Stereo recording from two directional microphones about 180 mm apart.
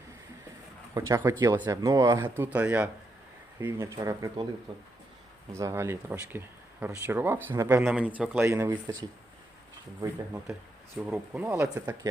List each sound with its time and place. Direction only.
0.9 s speech: 15° right (ahead or behind)
4.7 s speech: 30° right (ahead or behind)
5.5 s speech: 15° right (ahead or behind)
11.0 s speech: 5° right (ahead or behind)